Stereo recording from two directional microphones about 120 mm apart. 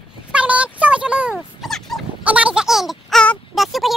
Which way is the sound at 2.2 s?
10° right (ahead or behind).